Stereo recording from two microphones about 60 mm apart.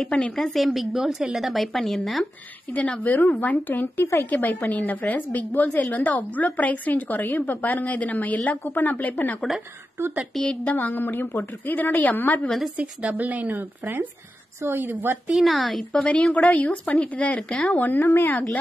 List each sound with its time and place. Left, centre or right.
0.0 s a woman's voice: centre
2.7 s a woman's voice: left
10.3 s speech: centre
10.6 s a woman's voice: left
12.4 s a woman's voice: centre
13.2 s speech: right
15.4 s a woman's voice: centre
15.9 s a woman's voice: centre
17.4 s speech: centre
17.6 s a woman's voice: left